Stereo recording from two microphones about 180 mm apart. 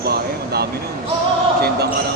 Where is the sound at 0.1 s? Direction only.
60° right (ahead or behind).